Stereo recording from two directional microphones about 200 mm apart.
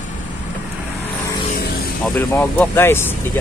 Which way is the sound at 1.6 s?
50° left (ahead or behind).